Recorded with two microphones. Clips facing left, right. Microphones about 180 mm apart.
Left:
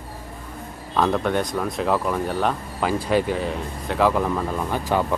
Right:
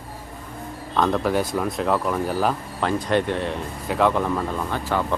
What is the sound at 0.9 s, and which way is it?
Speech, centre (ahead or behind).